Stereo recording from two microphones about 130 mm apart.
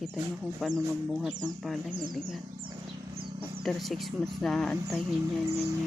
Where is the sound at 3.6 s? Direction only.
Centre (ahead or behind).